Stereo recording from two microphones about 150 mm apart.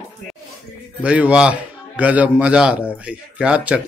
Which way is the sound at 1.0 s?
10° right (ahead or behind).